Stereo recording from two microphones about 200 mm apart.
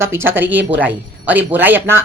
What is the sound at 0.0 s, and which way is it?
Speech, 10° right (ahead or behind).